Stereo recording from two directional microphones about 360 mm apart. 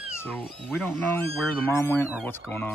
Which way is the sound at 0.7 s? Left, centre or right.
Centre.